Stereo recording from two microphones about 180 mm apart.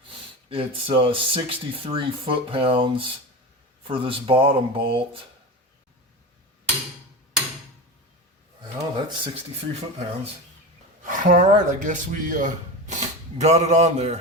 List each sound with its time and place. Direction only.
0.1 s speech: 30° right (ahead or behind)
8.6 s speech: 30° right (ahead or behind)
11.0 s a man's voice: 45° right (ahead or behind)